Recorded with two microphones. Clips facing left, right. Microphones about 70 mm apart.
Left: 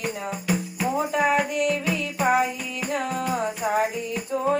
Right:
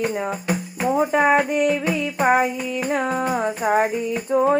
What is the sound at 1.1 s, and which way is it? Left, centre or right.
Music, right.